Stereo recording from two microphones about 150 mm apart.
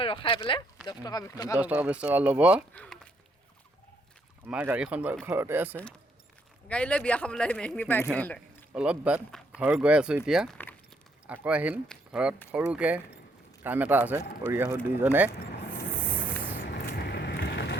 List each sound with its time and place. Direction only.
0.0 s speech: 35° left (ahead or behind)
1.5 s speech: 10° right (ahead or behind)
2.7 s a sound: 5° left (ahead or behind)
4.4 s speech: 10° right (ahead or behind)
6.7 s speech: 10° left (ahead or behind)
8.7 s speech: 5° right (ahead or behind)
16.8 s vehicle: 90° left